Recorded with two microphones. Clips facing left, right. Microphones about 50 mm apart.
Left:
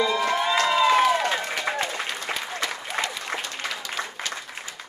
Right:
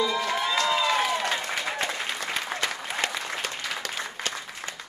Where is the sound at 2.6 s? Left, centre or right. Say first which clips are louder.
Left 1 dB; right.